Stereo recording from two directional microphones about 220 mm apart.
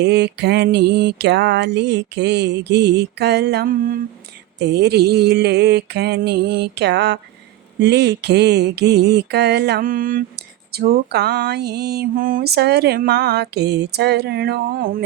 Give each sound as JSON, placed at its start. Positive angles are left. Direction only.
{"t": 0.0, "sound": "mantra", "side_deg": -50}